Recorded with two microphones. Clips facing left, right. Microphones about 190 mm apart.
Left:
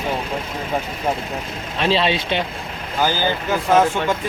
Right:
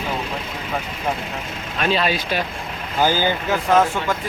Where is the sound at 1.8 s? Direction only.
25° left (ahead or behind).